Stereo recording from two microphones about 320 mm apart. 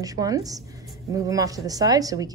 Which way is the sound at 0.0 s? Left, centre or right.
Centre.